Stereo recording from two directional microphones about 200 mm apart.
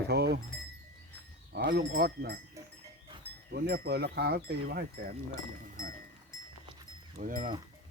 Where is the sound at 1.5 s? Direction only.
55° right (ahead or behind).